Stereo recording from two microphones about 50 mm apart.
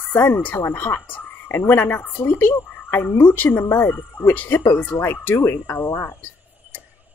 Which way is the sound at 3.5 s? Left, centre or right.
Left.